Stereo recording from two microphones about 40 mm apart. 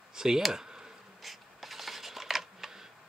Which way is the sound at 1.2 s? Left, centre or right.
Centre.